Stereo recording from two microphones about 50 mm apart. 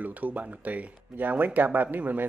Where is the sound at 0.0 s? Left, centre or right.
Right.